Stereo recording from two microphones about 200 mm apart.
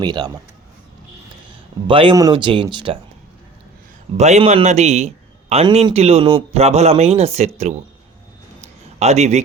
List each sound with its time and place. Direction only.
0.0 s speech: 20° right (ahead or behind)
1.9 s speech: 25° right (ahead or behind)
4.2 s a man's voice: 35° right (ahead or behind)
8.6 s a sound: 35° right (ahead or behind)